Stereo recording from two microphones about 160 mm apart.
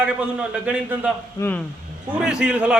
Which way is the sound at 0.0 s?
5° right (ahead or behind).